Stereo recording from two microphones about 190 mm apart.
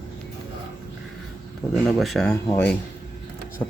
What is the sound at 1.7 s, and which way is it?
Speech, centre (ahead or behind).